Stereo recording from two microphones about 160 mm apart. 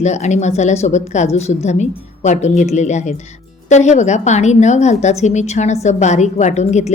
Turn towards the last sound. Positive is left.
turn(degrees=45)  # may be behind; listen again after turning